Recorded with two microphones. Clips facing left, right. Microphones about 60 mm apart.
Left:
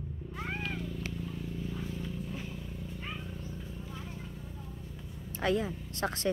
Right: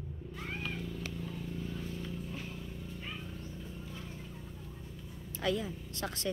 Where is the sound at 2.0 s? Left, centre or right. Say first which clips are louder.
Left 2 dB; centre.